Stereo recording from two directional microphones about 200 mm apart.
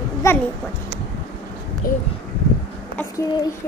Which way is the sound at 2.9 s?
15° left (ahead or behind).